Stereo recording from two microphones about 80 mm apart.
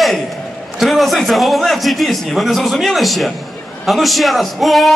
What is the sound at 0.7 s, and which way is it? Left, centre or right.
A man's voice, centre.